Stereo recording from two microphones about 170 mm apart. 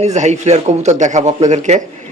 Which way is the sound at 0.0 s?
40° right (ahead or behind).